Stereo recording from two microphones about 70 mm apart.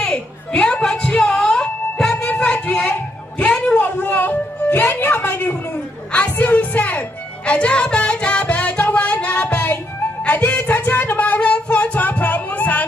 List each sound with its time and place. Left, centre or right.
0.0 s music: centre
2.1 s a sound: centre
3.8 s music: left